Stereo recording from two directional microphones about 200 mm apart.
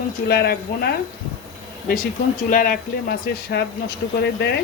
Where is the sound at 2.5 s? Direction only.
45° left (ahead or behind).